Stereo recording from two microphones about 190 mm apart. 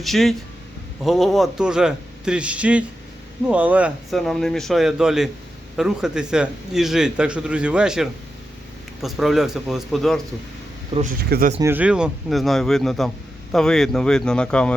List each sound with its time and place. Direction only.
0.0 s a man's voice: centre (ahead or behind)
10.9 s speech: 30° right (ahead or behind)
11.3 s speech: 50° right (ahead or behind)
11.6 s a man's voice: 10° right (ahead or behind)